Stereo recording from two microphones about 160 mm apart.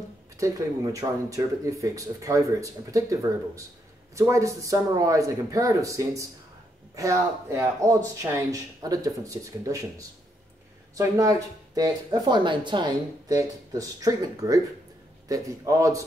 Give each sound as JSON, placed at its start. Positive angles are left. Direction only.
{"t": 0.4, "sound": "speech", "side_deg": -20}